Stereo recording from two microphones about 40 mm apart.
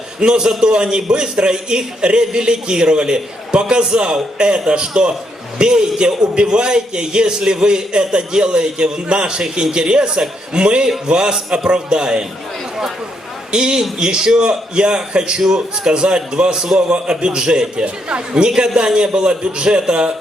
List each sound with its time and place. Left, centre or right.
0.2 s a man's voice: centre
13.5 s a man's voice: right